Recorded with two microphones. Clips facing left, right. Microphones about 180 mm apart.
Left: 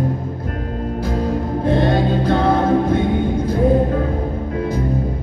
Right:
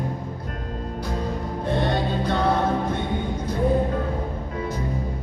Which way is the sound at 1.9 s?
50° left (ahead or behind).